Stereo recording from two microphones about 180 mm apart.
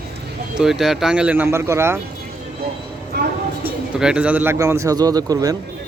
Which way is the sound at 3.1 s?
65° right (ahead or behind).